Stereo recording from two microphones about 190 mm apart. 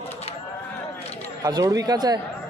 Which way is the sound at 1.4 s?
20° right (ahead or behind).